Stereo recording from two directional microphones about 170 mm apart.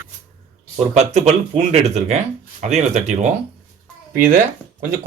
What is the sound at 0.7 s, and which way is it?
Speech, 40° right (ahead or behind).